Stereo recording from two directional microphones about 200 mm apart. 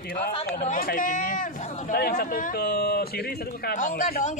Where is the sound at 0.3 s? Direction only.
30° left (ahead or behind).